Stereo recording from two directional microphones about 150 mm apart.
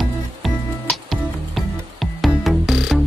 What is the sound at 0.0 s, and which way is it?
Music, centre (ahead or behind).